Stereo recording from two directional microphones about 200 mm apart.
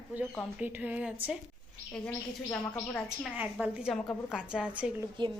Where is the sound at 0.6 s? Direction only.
10° right (ahead or behind).